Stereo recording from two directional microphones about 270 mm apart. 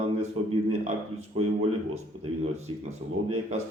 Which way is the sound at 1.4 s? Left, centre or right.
Right.